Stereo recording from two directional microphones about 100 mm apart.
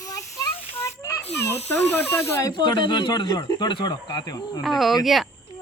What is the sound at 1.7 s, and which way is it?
Speech, 25° left (ahead or behind).